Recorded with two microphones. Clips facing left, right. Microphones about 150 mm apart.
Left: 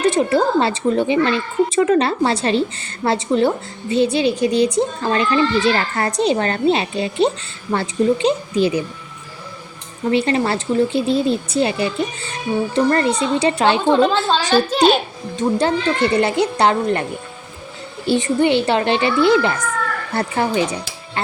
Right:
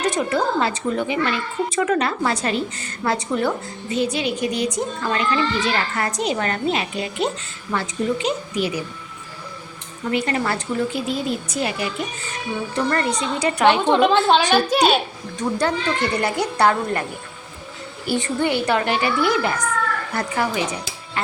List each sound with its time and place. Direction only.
0.0 s a woman's voice: 30° left (ahead or behind)
10.0 s a woman's voice: 30° left (ahead or behind)
13.8 s a woman's voice: 20° right (ahead or behind)
15.4 s a woman's voice: 25° left (ahead or behind)